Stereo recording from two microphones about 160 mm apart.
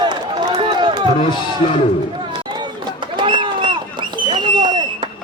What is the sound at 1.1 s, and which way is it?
Speech, 35° left (ahead or behind).